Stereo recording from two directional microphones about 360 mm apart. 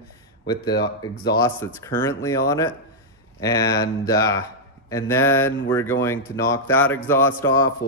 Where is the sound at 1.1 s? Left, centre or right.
Left.